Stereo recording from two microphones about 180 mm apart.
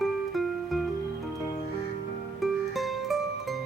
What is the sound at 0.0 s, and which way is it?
Music, centre (ahead or behind).